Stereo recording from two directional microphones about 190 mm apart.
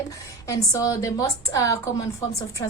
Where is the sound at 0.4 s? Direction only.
20° left (ahead or behind).